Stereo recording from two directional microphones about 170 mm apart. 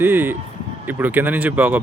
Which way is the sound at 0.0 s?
10° right (ahead or behind).